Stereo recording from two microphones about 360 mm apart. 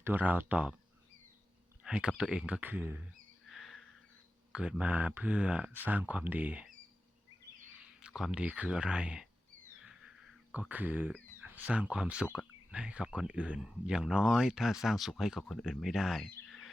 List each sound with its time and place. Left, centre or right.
0.0 s speech: centre
1.8 s speech: centre
8.0 s speech: centre
10.5 s speech: centre